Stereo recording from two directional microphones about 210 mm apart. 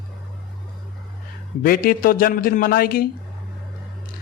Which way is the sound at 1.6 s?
45° left (ahead or behind).